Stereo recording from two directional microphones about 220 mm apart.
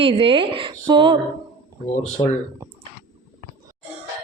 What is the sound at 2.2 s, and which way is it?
Speech, 25° left (ahead or behind).